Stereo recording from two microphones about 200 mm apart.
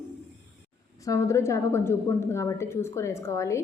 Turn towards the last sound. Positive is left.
turn(degrees=15)  # may be behind; listen again after turning